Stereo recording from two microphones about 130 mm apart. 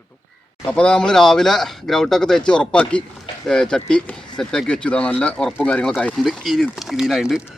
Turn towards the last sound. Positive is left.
turn(degrees=-5)  # may be behind; listen again after turning